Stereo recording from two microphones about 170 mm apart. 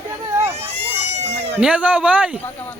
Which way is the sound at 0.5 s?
40° right (ahead or behind).